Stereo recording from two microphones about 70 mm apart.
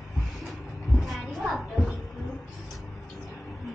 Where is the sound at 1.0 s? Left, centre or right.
Centre.